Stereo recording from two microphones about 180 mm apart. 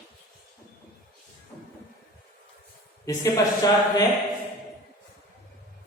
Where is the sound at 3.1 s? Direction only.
20° left (ahead or behind).